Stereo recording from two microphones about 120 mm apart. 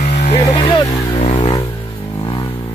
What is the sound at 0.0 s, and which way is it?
Vehicle, 70° left (ahead or behind).